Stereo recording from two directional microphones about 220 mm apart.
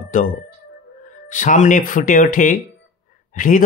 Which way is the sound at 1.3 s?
35° left (ahead or behind).